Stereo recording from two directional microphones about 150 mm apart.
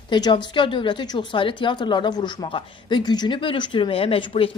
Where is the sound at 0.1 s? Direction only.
30° left (ahead or behind).